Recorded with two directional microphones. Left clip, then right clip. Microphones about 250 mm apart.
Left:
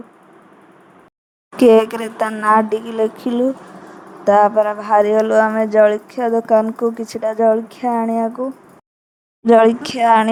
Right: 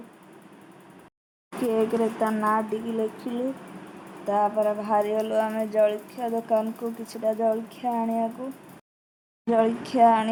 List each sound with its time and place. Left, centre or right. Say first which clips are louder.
1.6 s a woman's voice: left 13 dB; left
9.5 s a woman's voice: left 12 dB; left